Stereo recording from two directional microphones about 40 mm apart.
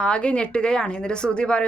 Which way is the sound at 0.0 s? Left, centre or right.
Left.